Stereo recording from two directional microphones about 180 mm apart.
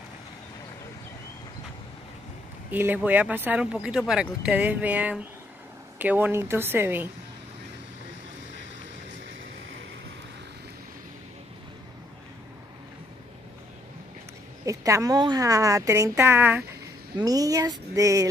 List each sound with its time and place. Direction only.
2.7 s speech: 10° right (ahead or behind)
14.7 s a woman's voice: 15° right (ahead or behind)